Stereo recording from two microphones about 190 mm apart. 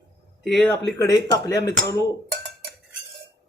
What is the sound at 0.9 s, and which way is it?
Speech, 15° left (ahead or behind).